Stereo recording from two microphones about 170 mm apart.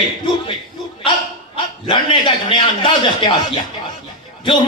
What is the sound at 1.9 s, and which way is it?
Speech, 30° left (ahead or behind).